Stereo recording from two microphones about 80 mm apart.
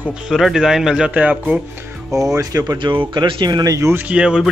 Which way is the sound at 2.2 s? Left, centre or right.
Right.